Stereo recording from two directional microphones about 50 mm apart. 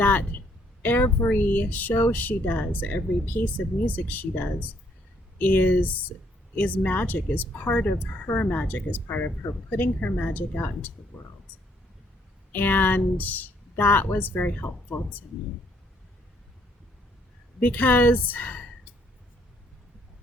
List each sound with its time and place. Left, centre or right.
0.0 s a sound: left
0.8 s a woman's voice: left
12.5 s a woman's voice: left
17.6 s a woman's voice: left